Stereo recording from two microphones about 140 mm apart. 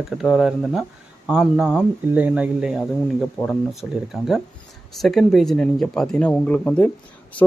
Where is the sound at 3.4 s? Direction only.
10° left (ahead or behind).